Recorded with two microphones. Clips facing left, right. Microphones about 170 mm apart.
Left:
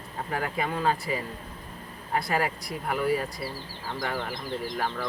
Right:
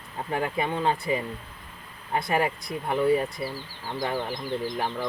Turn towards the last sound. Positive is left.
turn(degrees=-20)  # may be behind; listen again after turning